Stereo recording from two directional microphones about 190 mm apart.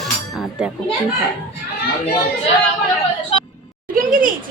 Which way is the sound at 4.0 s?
45° right (ahead or behind).